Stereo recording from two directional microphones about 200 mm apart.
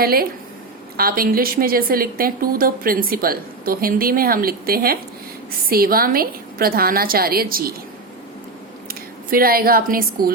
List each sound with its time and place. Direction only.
0.0 s a woman's voice: 50° right (ahead or behind)
8.9 s speech: 45° right (ahead or behind)